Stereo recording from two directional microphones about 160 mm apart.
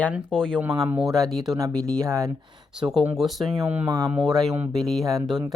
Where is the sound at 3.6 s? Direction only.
15° right (ahead or behind).